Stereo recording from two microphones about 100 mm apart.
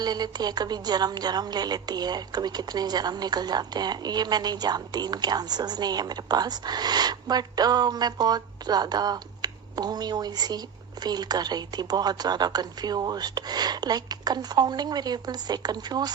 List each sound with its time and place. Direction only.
0.0 s speech: 45° right (ahead or behind)